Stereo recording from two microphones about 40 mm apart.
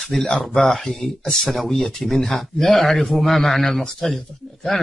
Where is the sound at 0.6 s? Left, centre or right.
Centre.